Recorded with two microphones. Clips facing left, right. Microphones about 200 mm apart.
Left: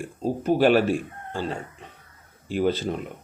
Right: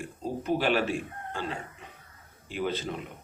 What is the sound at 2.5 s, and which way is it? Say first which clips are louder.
Speech: left 8 dB; 40° left (ahead or behind).